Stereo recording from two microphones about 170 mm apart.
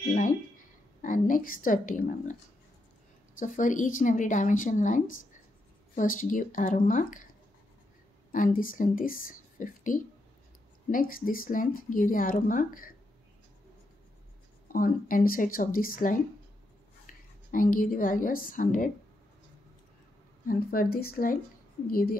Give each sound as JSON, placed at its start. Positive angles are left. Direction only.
{"t": 0.1, "sound": "a woman's voice", "side_deg": 50}
{"t": 3.3, "sound": "a woman's voice", "side_deg": 50}
{"t": 8.3, "sound": "a woman's voice", "side_deg": 50}
{"t": 14.7, "sound": "a woman's voice", "side_deg": 55}
{"t": 20.4, "sound": "speech", "side_deg": 60}